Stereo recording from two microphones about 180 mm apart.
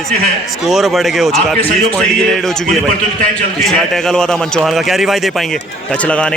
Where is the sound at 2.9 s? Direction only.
50° right (ahead or behind).